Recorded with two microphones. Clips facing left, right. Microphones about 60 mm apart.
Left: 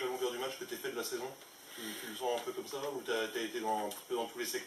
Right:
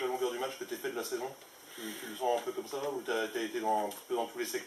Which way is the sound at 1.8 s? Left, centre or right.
Centre.